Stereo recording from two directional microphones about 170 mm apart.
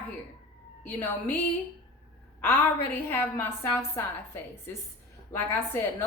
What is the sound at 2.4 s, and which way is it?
A woman's voice, 10° left (ahead or behind).